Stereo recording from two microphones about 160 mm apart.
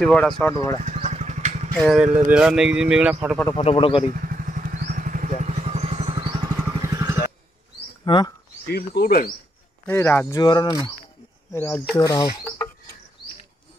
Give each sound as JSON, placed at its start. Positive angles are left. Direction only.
{"t": 0.0, "sound": "speech", "side_deg": 5}
{"t": 0.8, "sound": "vehicle", "side_deg": -45}
{"t": 1.8, "sound": "a man's voice", "side_deg": 0}
{"t": 3.5, "sound": "speech", "side_deg": 35}
{"t": 4.1, "sound": "vehicle", "side_deg": -60}
{"t": 6.7, "sound": "vehicle", "side_deg": -20}
{"t": 8.0, "sound": "speech", "side_deg": 25}
{"t": 8.6, "sound": "speech", "side_deg": 80}
{"t": 9.8, "sound": "speech", "side_deg": 15}
{"t": 11.5, "sound": "speech", "side_deg": 15}
{"t": 12.0, "sound": "speech", "side_deg": 25}